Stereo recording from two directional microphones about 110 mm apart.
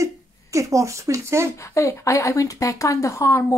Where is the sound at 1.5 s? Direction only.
25° left (ahead or behind).